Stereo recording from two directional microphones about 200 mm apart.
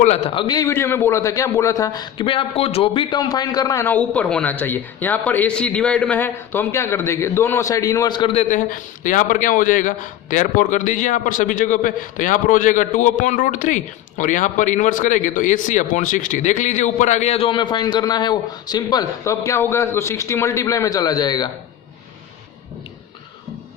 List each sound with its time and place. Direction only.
0.0 s a man's voice: 30° left (ahead or behind)
8.4 s a man's voice: 40° left (ahead or behind); by 21.5 s 20° left (ahead or behind)